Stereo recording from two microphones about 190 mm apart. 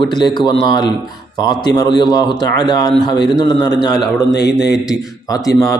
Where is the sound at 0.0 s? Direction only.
25° left (ahead or behind).